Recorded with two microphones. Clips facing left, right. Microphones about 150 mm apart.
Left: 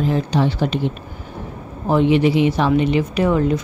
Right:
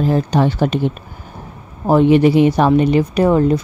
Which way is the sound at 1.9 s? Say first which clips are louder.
Right 4 dB; 45° right (ahead or behind).